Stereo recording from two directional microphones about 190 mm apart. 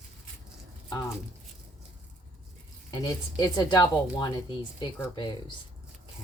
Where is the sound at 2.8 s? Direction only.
20° left (ahead or behind).